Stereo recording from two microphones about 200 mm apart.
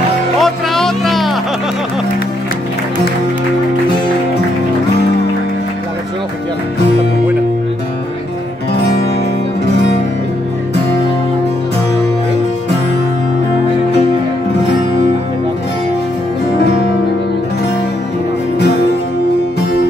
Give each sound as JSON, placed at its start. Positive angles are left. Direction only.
{"t": 0.4, "sound": "music", "side_deg": 0}